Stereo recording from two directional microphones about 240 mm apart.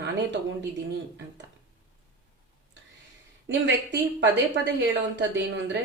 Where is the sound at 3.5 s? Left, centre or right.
Right.